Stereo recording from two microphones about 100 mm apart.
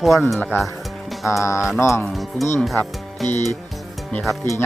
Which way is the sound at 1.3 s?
30° left (ahead or behind).